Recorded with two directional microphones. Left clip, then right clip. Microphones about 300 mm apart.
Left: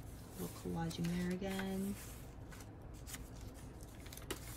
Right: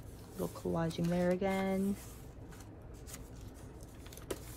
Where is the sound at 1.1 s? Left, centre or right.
Centre.